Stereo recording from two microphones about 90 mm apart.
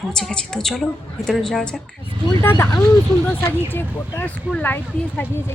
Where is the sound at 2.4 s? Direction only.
25° left (ahead or behind).